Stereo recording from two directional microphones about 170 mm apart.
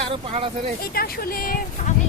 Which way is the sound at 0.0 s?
35° right (ahead or behind).